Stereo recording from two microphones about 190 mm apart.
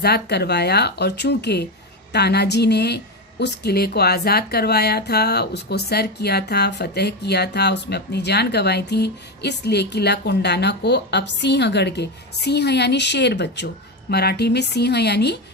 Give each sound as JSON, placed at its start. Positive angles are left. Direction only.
{"t": 0.0, "sound": "a woman's voice", "side_deg": 60}